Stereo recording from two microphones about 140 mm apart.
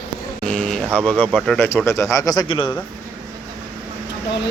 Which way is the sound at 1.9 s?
20° left (ahead or behind).